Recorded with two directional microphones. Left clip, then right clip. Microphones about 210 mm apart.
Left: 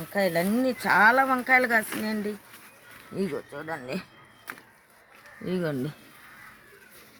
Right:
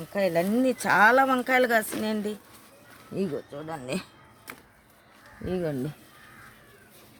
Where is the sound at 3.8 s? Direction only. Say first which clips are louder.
Right 2 dB; 40° right (ahead or behind).